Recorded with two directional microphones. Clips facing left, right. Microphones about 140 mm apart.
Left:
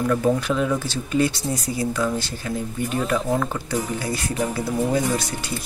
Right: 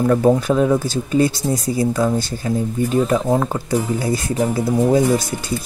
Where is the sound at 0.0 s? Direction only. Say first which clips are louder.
Right 6 dB; 40° right (ahead or behind).